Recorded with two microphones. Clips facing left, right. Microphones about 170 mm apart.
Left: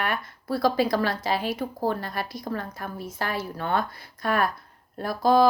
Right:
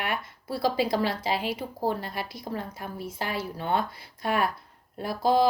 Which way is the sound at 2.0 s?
50° left (ahead or behind).